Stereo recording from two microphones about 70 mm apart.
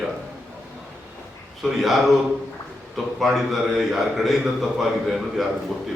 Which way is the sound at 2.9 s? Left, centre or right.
Centre.